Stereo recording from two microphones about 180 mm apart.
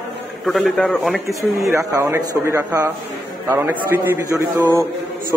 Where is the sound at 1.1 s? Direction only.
15° right (ahead or behind).